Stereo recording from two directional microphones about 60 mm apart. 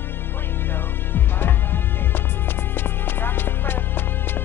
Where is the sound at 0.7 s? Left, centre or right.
Left.